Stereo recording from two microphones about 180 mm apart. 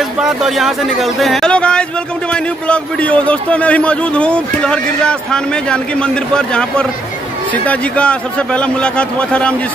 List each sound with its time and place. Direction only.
0.2 s a man's voice: centre (ahead or behind)